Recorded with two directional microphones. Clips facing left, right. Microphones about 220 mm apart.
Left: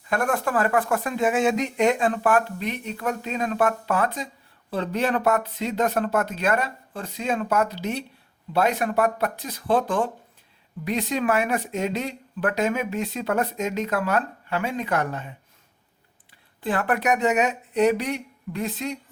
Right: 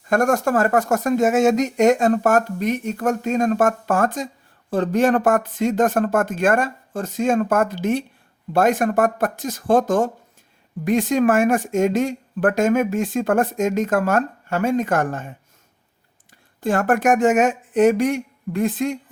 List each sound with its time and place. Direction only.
0.1 s speech: 45° right (ahead or behind)
16.6 s speech: 45° right (ahead or behind)